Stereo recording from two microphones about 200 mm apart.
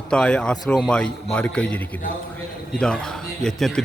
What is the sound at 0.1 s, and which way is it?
A man's voice, 5° left (ahead or behind).